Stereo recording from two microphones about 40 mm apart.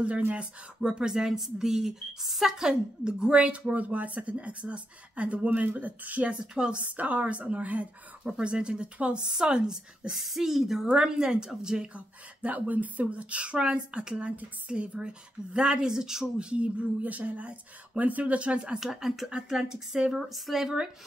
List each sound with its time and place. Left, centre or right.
0.7 s a woman's voice: centre
5.5 s a woman's voice: right
6.4 s speech: right
6.8 s a woman's voice: right
8.2 s speech: right
9.2 s a woman's voice: centre
10.1 s a woman's voice: centre
11.9 s a woman's voice: right; by 16.3 s centre
16.3 s a woman's voice: right
18.8 s a woman's voice: centre